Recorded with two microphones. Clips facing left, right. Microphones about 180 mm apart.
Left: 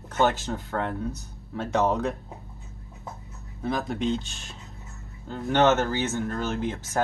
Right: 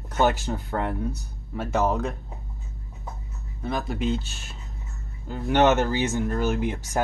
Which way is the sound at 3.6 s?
Centre (ahead or behind).